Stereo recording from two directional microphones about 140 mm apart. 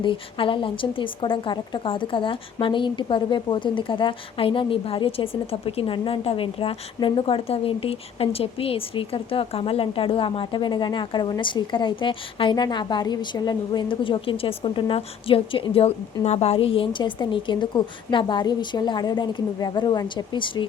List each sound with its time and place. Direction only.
0.0 s speech: 35° left (ahead or behind)